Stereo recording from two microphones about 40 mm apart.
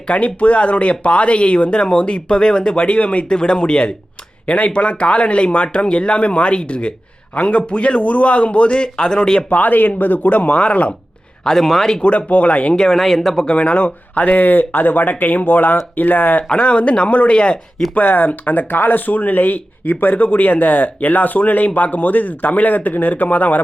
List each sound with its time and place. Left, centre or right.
0.1 s speech: left
3.2 s a man's voice: left
9.5 s speech: left
11.4 s speech: centre
12.0 s speech: left
12.7 s speech: centre
13.5 s speech: left
16.6 s a man's voice: left
17.9 s speech: left